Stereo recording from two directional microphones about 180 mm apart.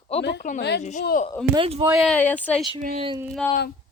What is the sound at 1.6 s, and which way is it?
Speech, 35° right (ahead or behind).